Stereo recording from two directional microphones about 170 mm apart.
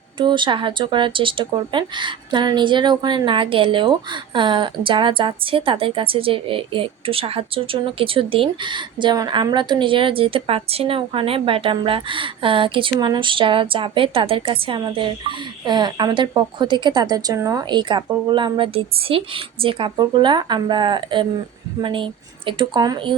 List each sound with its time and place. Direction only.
0.2 s speech: 30° right (ahead or behind)